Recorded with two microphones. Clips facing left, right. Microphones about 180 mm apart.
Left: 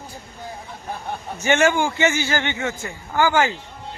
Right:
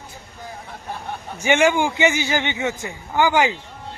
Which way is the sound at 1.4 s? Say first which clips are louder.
Right 1 dB; 15° right (ahead or behind).